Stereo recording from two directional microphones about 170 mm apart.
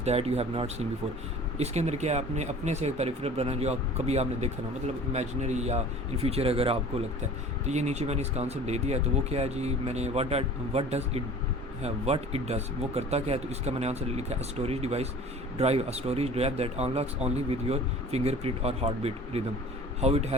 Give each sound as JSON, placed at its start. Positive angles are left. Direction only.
{"t": 0.0, "sound": "speech", "side_deg": -35}